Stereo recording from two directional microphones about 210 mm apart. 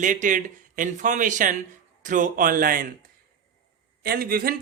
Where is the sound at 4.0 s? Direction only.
45° right (ahead or behind).